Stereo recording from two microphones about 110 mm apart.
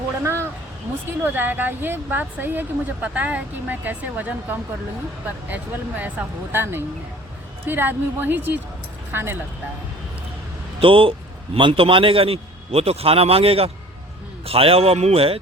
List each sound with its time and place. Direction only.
1.2 s speech: 15° right (ahead or behind)
6.0 s speech: 15° right (ahead or behind)
10.8 s a man's voice: 55° right (ahead or behind)